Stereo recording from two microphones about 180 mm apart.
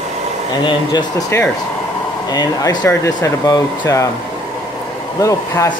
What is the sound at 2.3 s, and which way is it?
Speech, 20° left (ahead or behind).